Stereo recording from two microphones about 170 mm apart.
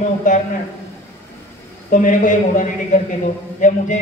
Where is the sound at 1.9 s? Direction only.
50° left (ahead or behind).